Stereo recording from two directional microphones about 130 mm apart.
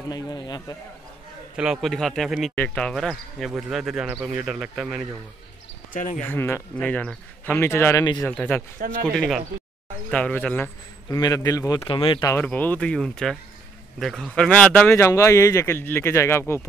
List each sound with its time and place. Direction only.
0.1 s a man's voice: 30° left (ahead or behind)
1.6 s speech: centre (ahead or behind)
4.1 s speech: 20° right (ahead or behind)
4.5 s speech: centre (ahead or behind)
5.9 s speech: 80° left
6.2 s speech: 15° left (ahead or behind)
8.2 s speech: 5° left (ahead or behind)
8.7 s speech: 90° right
9.1 s speech: 10° left (ahead or behind)
11.1 s speech: 30° left (ahead or behind)
11.9 s a man's voice: 40° left (ahead or behind)
12.4 s speech: 15° left (ahead or behind)